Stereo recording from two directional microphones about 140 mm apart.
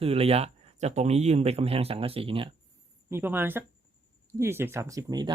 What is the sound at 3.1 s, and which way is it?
Speech, 15° right (ahead or behind).